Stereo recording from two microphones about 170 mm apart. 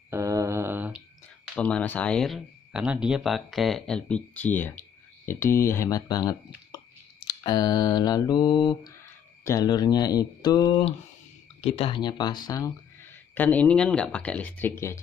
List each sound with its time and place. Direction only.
0.1 s a sound: 20° right (ahead or behind)
1.5 s speech: 5° left (ahead or behind); by 10.7 s 20° left (ahead or behind)
10.7 s speech: 30° left (ahead or behind)
13.3 s speech: 10° left (ahead or behind)